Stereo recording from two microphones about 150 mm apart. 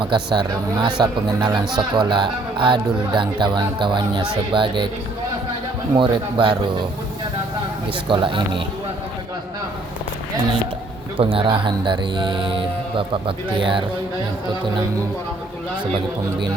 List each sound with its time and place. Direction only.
0.1 s speech: 30° right (ahead or behind)
6.0 s speech: 35° right (ahead or behind)
8.0 s speech: 35° right (ahead or behind)
11.2 s speech: 35° right (ahead or behind)